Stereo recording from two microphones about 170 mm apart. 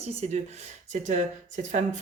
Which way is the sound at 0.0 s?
40° right (ahead or behind).